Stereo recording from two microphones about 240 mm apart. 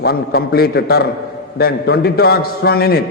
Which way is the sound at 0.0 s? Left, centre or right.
Left.